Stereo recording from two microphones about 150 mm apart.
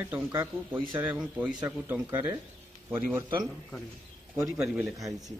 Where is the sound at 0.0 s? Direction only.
15° right (ahead or behind).